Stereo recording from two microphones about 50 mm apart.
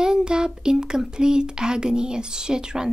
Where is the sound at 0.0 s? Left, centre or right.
Centre.